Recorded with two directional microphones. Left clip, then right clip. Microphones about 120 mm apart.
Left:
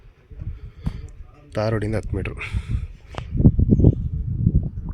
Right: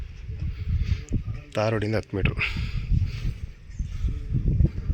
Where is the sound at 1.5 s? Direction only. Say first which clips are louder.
Left 1 dB; 35° left (ahead or behind).